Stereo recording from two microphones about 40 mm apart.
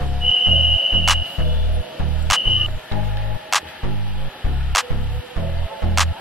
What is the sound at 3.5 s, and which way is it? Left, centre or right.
Music, centre.